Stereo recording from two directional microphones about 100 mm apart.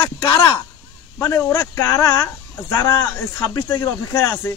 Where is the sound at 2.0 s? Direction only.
45° left (ahead or behind).